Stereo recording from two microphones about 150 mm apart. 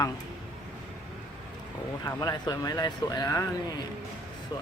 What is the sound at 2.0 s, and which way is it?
Speech, 25° left (ahead or behind).